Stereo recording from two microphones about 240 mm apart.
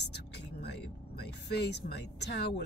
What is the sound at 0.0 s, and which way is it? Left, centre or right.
Music, left.